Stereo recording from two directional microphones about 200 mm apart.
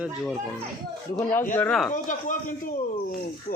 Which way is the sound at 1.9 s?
40° left (ahead or behind).